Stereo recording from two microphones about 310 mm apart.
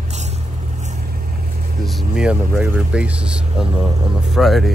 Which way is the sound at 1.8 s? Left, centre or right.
Centre.